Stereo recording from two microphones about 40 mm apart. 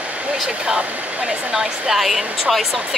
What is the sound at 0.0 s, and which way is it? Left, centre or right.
Vehicle, right.